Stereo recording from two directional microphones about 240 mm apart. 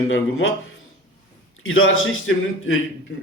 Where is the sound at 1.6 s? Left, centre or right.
Left.